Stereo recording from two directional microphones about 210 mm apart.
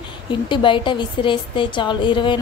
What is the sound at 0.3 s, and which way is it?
A woman's voice, 25° left (ahead or behind).